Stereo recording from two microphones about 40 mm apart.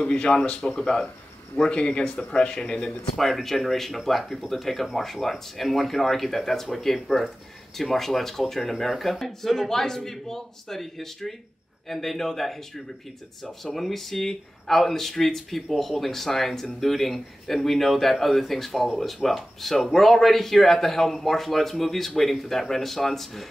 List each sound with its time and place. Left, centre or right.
0.0 s speech: left
3.2 s speech: centre
9.6 s a man's voice: centre